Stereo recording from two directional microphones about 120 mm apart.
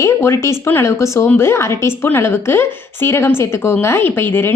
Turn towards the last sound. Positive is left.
turn(degrees=15)  # may be behind; listen again after turning